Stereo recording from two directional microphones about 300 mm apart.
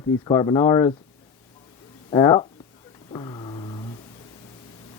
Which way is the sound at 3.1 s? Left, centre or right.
Centre.